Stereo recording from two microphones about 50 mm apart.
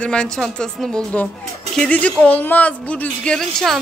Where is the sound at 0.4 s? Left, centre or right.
Centre.